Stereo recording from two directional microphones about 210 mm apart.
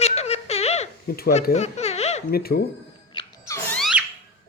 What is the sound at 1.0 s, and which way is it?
Speech, 45° left (ahead or behind).